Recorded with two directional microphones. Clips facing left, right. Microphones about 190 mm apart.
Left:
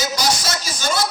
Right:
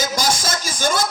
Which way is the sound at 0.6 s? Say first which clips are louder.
Right 2 dB; 50° right (ahead or behind).